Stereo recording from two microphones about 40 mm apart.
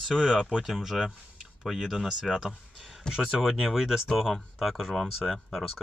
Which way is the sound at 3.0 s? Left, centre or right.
Centre.